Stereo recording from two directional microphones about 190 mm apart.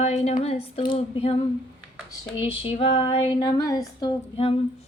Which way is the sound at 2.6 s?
30° left (ahead or behind).